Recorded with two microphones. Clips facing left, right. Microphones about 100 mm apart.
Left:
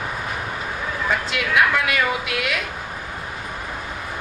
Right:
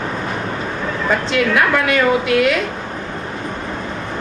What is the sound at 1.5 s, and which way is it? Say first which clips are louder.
Speech: even; 40° right (ahead or behind).